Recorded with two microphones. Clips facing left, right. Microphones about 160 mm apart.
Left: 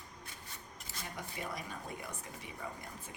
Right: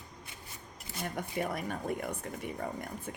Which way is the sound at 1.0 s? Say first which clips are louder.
Right 9 dB; 55° right (ahead or behind).